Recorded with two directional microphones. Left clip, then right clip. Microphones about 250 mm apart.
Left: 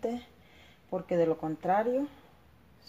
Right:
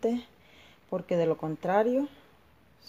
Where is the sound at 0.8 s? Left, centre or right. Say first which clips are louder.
Right 1 dB; right.